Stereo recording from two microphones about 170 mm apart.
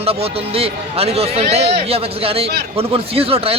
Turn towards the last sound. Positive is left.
turn(degrees=-35)  # may be behind; listen again after turning